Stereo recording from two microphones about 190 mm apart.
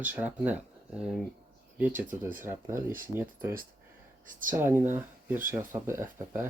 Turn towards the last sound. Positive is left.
turn(degrees=-10)  # may be behind; listen again after turning